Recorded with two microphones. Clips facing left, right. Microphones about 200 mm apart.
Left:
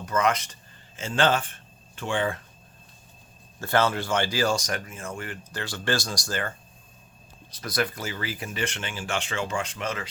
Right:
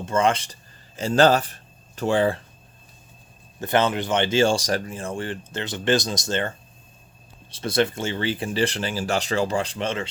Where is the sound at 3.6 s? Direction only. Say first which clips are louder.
Right 3 dB; 20° right (ahead or behind).